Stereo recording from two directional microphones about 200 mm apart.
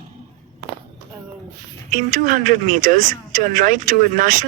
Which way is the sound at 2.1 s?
40° right (ahead or behind).